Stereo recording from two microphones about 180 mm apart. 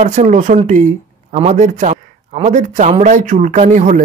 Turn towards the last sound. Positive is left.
turn(degrees=-45)  # may be behind; listen again after turning